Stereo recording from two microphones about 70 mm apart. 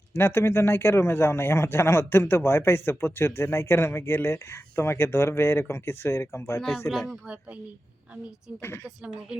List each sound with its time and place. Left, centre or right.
0.1 s a man's voice: left